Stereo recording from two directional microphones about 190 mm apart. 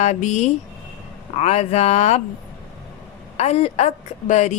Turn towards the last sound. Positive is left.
turn(degrees=40)  # may be behind; listen again after turning